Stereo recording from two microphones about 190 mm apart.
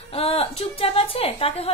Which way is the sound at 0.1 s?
30° left (ahead or behind).